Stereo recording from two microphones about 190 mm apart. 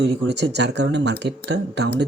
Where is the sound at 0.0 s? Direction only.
65° right (ahead or behind).